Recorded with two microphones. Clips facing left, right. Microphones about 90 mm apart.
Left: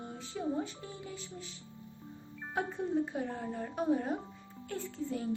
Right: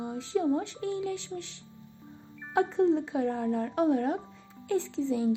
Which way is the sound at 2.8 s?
90° right.